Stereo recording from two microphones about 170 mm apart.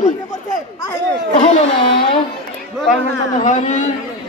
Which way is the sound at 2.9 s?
45° left (ahead or behind).